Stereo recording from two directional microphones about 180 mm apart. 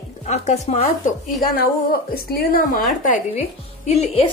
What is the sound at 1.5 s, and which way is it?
A woman's voice, 55° left (ahead or behind).